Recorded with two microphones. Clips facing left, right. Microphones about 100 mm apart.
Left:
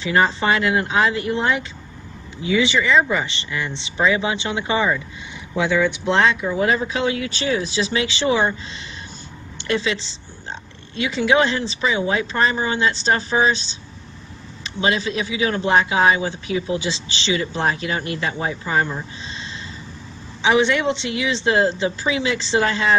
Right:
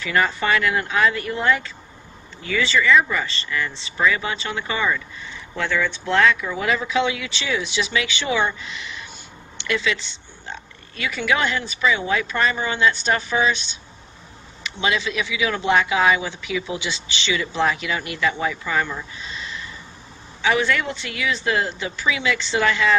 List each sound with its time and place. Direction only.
0.0 s speech: 25° left (ahead or behind)